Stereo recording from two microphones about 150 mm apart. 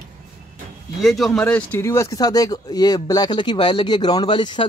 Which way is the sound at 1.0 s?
Centre (ahead or behind).